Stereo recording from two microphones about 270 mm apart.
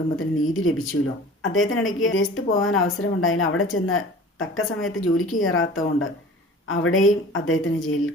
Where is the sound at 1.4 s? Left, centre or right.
Left.